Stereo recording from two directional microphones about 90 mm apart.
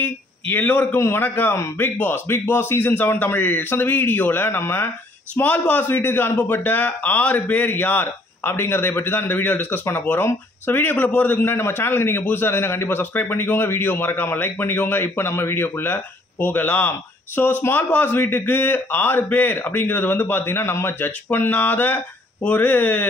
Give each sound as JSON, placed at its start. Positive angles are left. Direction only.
{"t": 0.0, "sound": "a man's voice", "side_deg": 20}
{"t": 5.3, "sound": "a man's voice", "side_deg": 15}